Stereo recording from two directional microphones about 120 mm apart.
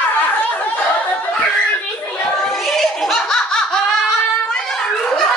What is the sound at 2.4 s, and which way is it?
Laughter, centre (ahead or behind).